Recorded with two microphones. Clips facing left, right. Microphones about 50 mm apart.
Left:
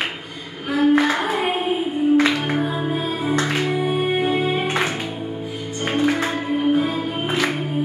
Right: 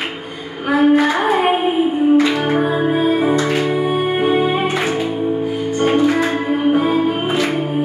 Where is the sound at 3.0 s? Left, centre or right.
Centre.